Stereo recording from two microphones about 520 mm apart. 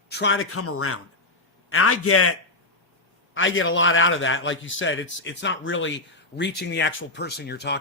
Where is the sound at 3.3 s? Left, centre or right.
Left.